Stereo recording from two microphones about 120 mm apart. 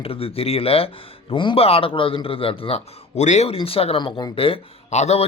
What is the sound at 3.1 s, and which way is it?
Speech, 80° left.